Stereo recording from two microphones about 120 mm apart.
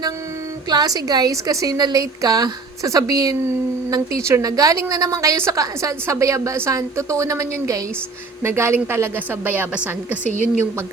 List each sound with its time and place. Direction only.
0.7 s a woman's voice: 35° right (ahead or behind); by 10.2 s 15° right (ahead or behind)